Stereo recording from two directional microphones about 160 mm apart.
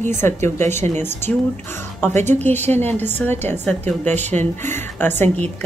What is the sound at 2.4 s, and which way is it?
A woman's voice, 10° left (ahead or behind).